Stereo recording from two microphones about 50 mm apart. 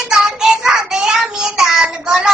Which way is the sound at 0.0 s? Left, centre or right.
Centre.